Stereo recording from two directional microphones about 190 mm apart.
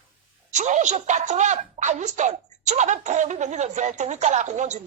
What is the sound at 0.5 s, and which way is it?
A woman's voice, 40° right (ahead or behind).